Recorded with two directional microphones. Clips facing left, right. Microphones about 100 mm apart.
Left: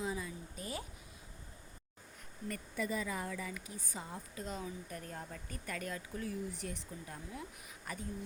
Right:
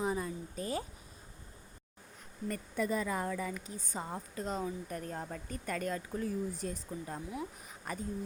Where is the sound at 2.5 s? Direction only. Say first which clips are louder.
Right 4 dB; 45° right (ahead or behind).